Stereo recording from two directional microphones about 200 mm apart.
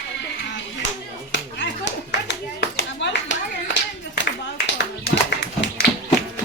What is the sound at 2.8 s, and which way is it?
Clapping, 65° left (ahead or behind).